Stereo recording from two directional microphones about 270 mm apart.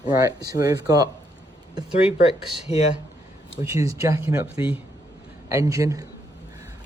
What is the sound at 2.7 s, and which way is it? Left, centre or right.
Speech, left.